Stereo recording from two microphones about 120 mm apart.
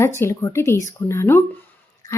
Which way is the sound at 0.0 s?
20° left (ahead or behind).